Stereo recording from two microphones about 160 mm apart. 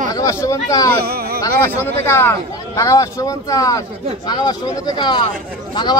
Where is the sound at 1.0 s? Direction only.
75° right (ahead or behind).